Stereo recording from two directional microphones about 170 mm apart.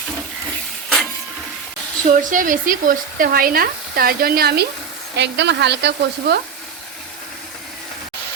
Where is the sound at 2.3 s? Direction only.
50° right (ahead or behind); by 4.7 s 70° right (ahead or behind).